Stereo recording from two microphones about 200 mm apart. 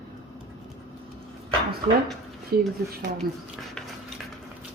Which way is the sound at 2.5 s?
50° right (ahead or behind).